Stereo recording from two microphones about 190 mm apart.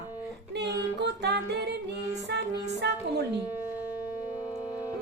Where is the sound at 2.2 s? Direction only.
65° right (ahead or behind).